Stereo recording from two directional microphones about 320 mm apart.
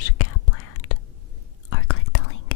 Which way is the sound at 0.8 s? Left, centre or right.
Left.